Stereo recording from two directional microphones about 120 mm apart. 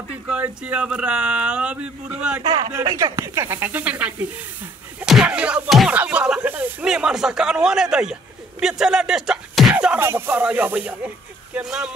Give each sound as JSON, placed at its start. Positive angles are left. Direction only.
{"t": 0.3, "sound": "speech", "side_deg": -10}
{"t": 2.7, "sound": "speech", "side_deg": -30}
{"t": 9.9, "sound": "speech", "side_deg": -20}